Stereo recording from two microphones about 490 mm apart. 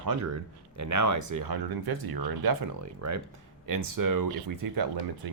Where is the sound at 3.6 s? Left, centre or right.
Right.